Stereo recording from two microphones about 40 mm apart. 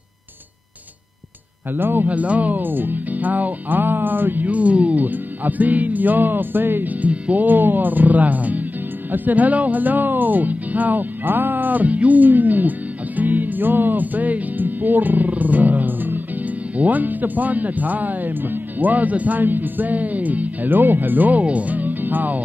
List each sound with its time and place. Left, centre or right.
1.8 s speech: right
2.0 s a man's voice: right
4.5 s speech: right
5.0 s a man's voice: right
6.9 s speech: right
7.4 s a man's voice: right